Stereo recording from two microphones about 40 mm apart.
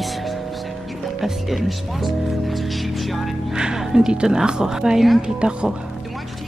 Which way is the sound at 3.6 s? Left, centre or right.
Centre.